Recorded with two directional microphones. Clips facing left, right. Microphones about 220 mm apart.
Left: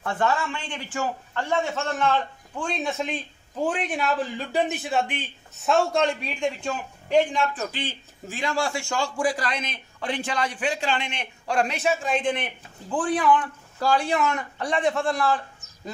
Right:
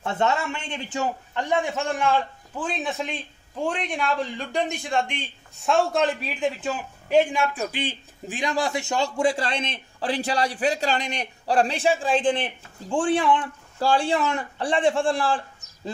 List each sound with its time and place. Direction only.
0.0 s a man's voice: 25° right (ahead or behind)